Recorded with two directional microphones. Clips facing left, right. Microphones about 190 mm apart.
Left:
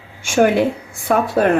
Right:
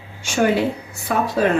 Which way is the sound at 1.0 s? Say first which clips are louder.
Left 3 dB; 55° left (ahead or behind).